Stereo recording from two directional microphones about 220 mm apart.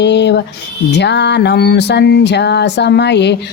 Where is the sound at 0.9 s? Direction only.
50° left (ahead or behind).